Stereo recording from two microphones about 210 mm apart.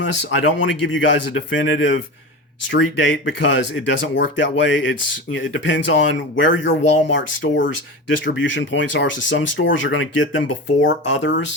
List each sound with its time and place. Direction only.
0.0 s speech: 60° left (ahead or behind)
8.2 s speech: 60° left (ahead or behind)